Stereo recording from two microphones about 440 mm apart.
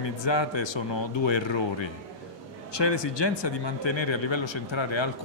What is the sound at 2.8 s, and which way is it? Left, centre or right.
Speech, left.